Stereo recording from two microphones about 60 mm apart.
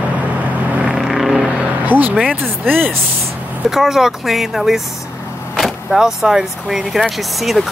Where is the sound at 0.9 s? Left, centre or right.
Centre.